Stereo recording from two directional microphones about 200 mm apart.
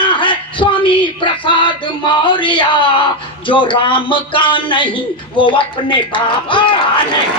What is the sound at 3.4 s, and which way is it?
A man's voice, 25° left (ahead or behind).